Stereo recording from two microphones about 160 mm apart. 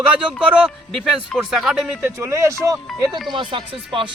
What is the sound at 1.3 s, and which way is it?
Speech, centre (ahead or behind).